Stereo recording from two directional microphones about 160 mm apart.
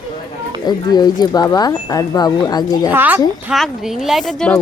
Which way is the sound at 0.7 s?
25° left (ahead or behind).